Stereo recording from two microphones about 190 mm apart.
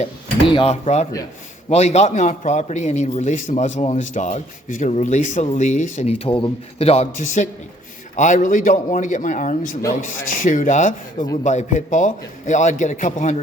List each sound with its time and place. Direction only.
0.0 s speech: 30° left (ahead or behind)